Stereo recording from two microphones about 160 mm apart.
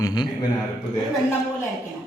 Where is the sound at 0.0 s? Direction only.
25° left (ahead or behind).